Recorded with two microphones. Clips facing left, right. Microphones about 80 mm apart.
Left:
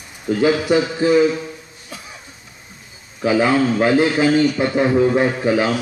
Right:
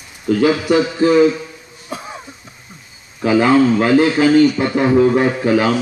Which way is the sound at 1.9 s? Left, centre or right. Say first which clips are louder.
Right 8 dB; right.